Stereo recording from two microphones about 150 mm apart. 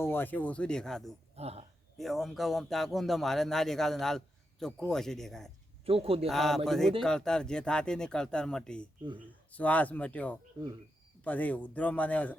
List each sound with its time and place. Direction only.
0.0 s a man's voice: 15° left (ahead or behind)
1.4 s a man's voice: 45° right (ahead or behind)
2.0 s speech: centre (ahead or behind)
5.8 s a man's voice: 40° right (ahead or behind)
6.2 s a man's voice: centre (ahead or behind)